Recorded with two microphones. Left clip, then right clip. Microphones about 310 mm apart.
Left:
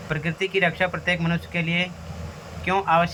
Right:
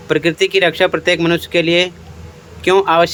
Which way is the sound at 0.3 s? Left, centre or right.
Right.